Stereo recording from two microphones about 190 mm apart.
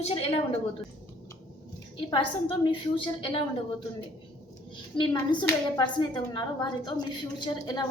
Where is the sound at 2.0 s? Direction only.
25° left (ahead or behind).